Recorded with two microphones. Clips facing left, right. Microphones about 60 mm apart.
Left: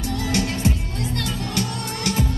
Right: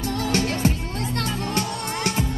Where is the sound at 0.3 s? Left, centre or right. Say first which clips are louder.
Even; right.